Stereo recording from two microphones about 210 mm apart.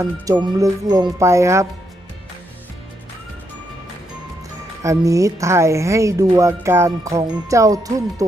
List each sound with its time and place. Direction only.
0.0 s speech: 20° right (ahead or behind)
4.8 s speech: 15° right (ahead or behind)